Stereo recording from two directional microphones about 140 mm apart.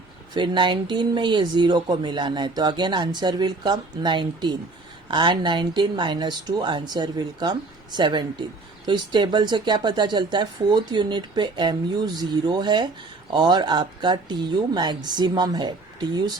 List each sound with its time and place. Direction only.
0.3 s speech: 35° right (ahead or behind)